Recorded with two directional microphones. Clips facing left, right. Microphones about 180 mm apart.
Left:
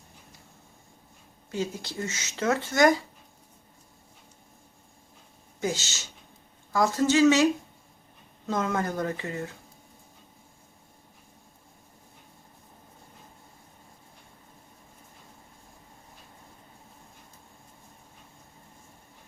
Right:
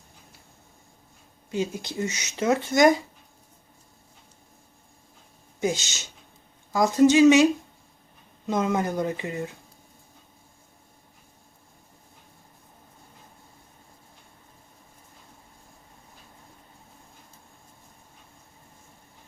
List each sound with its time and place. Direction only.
1.5 s speech: 15° right (ahead or behind)
5.5 s speech: 15° right (ahead or behind)
8.4 s speech: 15° right (ahead or behind)